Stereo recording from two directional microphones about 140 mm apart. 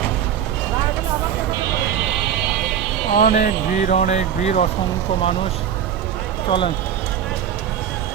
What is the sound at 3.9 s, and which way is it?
Speech, 55° left (ahead or behind).